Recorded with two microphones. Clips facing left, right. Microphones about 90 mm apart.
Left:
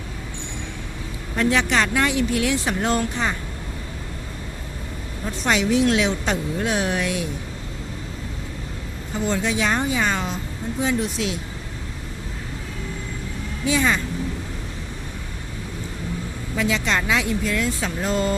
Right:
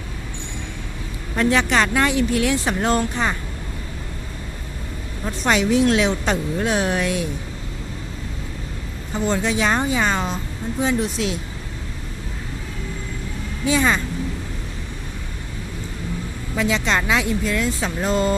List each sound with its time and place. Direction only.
1.4 s speech: 40° right (ahead or behind)
5.5 s speech: 45° right (ahead or behind)
9.2 s speech: 35° right (ahead or behind)
13.7 s speech: 35° right (ahead or behind)
16.6 s speech: 25° right (ahead or behind)